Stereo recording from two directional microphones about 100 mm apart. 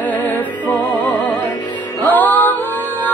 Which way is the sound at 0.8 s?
45° left (ahead or behind).